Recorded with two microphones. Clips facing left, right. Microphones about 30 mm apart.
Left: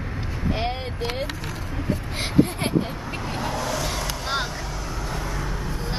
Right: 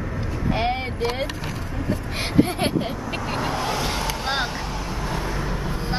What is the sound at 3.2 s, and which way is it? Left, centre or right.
Vehicle, right.